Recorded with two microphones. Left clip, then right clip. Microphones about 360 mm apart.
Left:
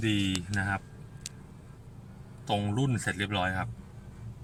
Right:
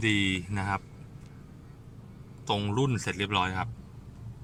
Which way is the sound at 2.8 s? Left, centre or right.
Right.